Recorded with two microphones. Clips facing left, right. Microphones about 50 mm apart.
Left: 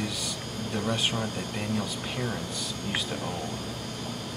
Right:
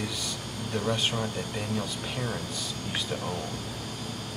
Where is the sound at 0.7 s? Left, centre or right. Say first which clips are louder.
Right 1 dB; centre.